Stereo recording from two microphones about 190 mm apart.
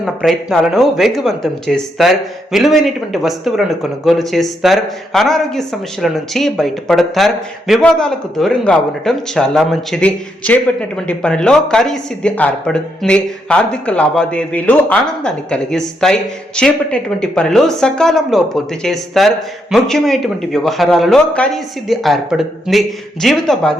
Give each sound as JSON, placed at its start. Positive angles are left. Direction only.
{"t": 0.0, "sound": "speech", "side_deg": 0}